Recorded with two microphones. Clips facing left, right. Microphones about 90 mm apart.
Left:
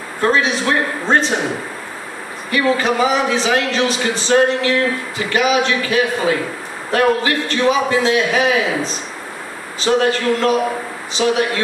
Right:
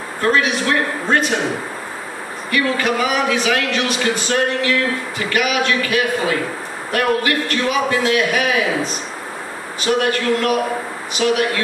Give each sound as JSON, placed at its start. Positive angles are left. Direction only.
{"t": 0.2, "sound": "a man's voice", "side_deg": 30}
{"t": 2.5, "sound": "a man's voice", "side_deg": 25}